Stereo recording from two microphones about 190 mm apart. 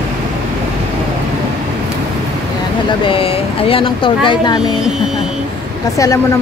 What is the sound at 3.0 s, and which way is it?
Speech, 30° left (ahead or behind).